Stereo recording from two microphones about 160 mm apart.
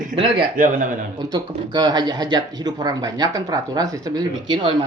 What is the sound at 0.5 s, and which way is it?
Speech, 55° right (ahead or behind).